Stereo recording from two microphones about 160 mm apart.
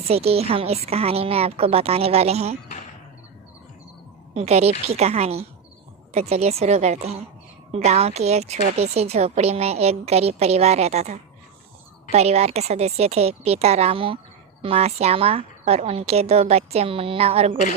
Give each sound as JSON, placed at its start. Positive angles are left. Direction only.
{"t": 0.0, "sound": "a woman's voice", "side_deg": -40}
{"t": 4.4, "sound": "a woman's voice", "side_deg": -40}